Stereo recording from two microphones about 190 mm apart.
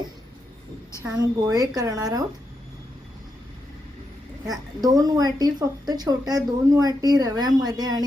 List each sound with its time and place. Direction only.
1.0 s speech: 20° right (ahead or behind)
4.8 s speech: 20° right (ahead or behind)